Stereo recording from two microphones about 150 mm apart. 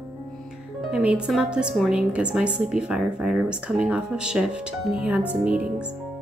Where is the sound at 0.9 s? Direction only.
10° right (ahead or behind).